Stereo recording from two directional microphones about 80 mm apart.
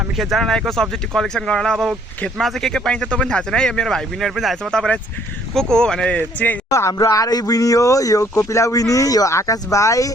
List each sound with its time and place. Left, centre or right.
0.2 s speech: centre
1.7 s speech: centre
6.1 s speech: centre
6.7 s speech: left